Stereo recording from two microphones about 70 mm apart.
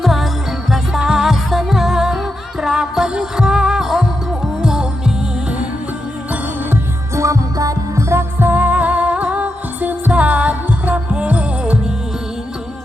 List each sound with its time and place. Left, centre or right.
0.0 s music: centre
7.2 s music: right
8.1 s music: right